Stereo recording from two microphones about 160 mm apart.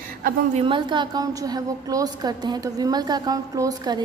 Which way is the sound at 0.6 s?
30° right (ahead or behind).